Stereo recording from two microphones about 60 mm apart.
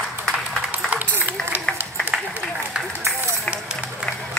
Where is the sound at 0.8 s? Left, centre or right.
Right.